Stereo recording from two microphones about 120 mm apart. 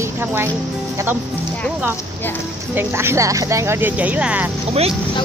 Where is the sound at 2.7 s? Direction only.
20° right (ahead or behind).